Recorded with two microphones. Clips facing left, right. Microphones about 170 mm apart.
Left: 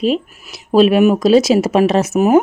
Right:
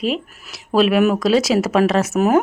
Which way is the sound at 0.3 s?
15° left (ahead or behind).